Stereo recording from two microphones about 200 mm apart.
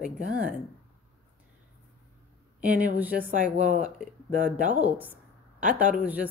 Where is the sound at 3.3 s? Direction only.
40° right (ahead or behind).